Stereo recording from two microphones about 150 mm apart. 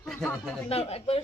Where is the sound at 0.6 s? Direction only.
40° left (ahead or behind).